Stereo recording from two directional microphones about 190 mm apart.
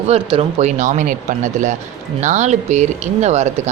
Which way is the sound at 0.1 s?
30° right (ahead or behind).